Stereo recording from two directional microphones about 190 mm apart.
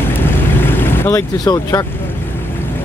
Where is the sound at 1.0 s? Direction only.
15° left (ahead or behind).